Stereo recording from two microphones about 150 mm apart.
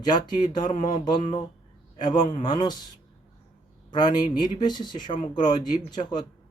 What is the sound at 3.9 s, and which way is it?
Speech, 30° left (ahead or behind).